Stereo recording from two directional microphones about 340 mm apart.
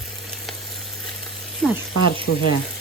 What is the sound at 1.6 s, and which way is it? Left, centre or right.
Speech, centre.